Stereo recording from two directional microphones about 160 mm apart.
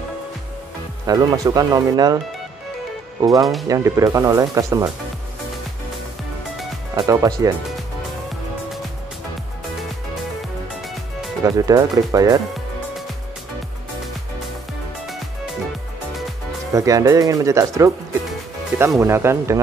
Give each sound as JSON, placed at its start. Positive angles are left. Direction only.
{"t": 1.0, "sound": "speech", "side_deg": -25}
{"t": 3.2, "sound": "speech", "side_deg": -20}
{"t": 7.0, "sound": "speech", "side_deg": -20}
{"t": 11.4, "sound": "speech", "side_deg": -25}
{"t": 16.7, "sound": "speech", "side_deg": -20}
{"t": 18.9, "sound": "speech", "side_deg": -15}